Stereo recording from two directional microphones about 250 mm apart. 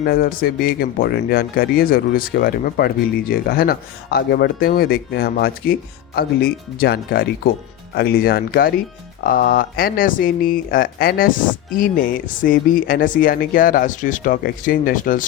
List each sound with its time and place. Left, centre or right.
0.0 s speech: left